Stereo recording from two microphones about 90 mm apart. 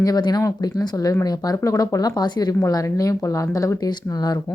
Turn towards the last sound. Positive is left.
turn(degrees=45)  # may be behind; listen again after turning